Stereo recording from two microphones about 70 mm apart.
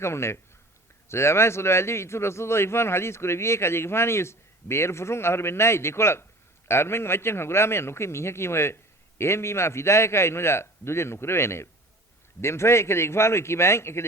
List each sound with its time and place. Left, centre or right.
0.0 s a man's voice: left